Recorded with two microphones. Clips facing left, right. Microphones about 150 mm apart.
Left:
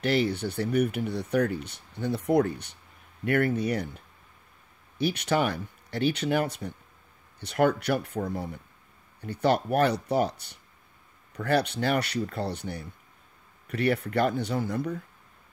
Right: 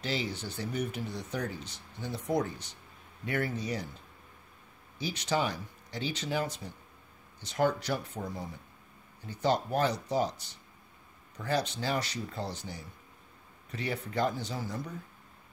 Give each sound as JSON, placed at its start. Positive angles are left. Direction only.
{"t": 0.0, "sound": "speech", "side_deg": 60}